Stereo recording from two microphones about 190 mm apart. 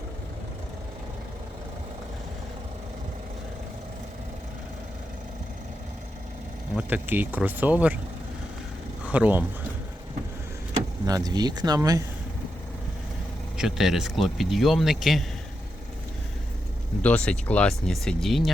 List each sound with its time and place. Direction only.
6.7 s speech: 10° right (ahead or behind)
9.0 s speech: 10° right (ahead or behind)
11.0 s speech: 20° right (ahead or behind)
13.6 s speech: 5° right (ahead or behind)
17.0 s speech: 5° left (ahead or behind)